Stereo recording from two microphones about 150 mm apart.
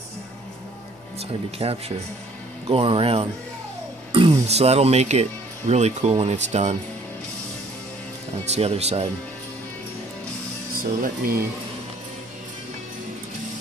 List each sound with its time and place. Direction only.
1.6 s speech: 40° right (ahead or behind)
8.5 s speech: 45° right (ahead or behind)
10.7 s speech: 70° right (ahead or behind)